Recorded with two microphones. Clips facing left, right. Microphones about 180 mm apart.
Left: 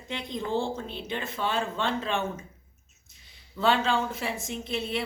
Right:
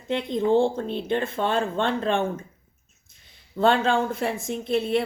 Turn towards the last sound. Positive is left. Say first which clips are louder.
# right 8 dB
turn(degrees=-55)  # may be behind; listen again after turning